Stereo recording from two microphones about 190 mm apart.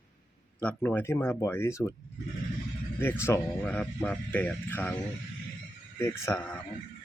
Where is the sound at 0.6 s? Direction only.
10° left (ahead or behind).